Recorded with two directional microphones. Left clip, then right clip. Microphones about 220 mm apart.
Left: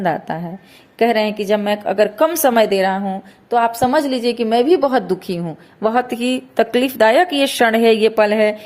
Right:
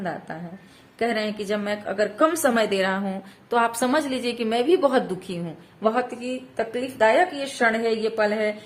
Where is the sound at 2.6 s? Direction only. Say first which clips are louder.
Left 7 dB; 15° left (ahead or behind).